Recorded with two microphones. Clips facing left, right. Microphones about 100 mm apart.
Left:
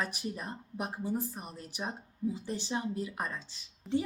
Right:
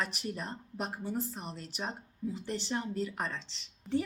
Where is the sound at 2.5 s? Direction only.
15° left (ahead or behind).